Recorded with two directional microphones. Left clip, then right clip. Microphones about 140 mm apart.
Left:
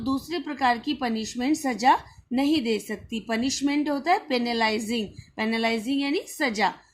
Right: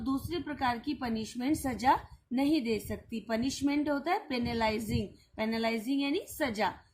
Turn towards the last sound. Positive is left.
turn(degrees=40)  # may be behind; listen again after turning